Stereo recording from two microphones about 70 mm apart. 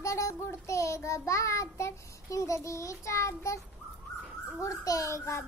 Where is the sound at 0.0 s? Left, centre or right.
Left.